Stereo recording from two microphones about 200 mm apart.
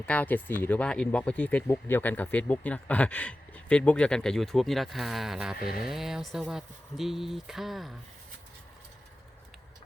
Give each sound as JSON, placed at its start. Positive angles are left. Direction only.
{"t": 0.0, "sound": "speech", "side_deg": 5}
{"t": 5.5, "sound": "speech", "side_deg": 45}
{"t": 5.8, "sound": "speech", "side_deg": 0}